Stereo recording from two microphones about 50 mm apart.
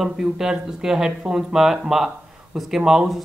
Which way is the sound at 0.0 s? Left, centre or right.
Centre.